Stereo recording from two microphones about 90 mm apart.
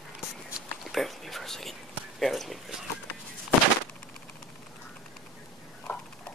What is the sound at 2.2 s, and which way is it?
Speech, centre (ahead or behind).